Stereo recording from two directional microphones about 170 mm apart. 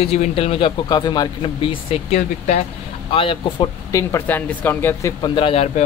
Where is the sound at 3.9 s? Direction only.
15° left (ahead or behind).